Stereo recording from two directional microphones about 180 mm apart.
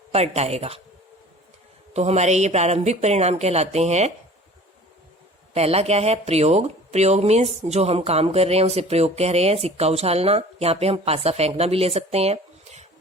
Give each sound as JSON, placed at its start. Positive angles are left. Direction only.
{"t": 0.1, "sound": "speech", "side_deg": -35}
{"t": 1.9, "sound": "speech", "side_deg": -40}
{"t": 5.5, "sound": "speech", "side_deg": -35}